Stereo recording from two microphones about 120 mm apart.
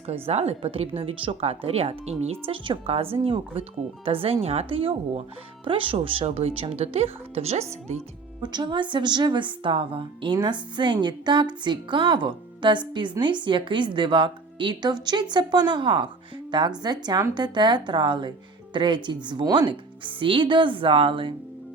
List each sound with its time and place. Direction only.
0.1 s a woman's voice: 60° right (ahead or behind)
8.4 s a woman's voice: 40° right (ahead or behind)